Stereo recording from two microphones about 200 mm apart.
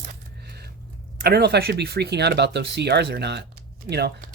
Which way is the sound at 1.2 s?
55° right (ahead or behind).